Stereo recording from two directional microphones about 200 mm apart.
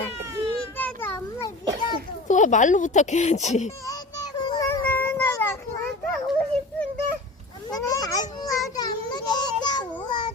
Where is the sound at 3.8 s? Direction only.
20° left (ahead or behind).